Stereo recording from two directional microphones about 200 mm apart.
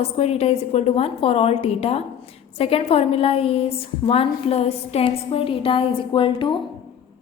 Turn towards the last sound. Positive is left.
turn(degrees=25)  # may be behind; listen again after turning